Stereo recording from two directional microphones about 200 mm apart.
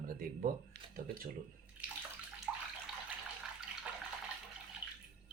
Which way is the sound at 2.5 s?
Centre (ahead or behind).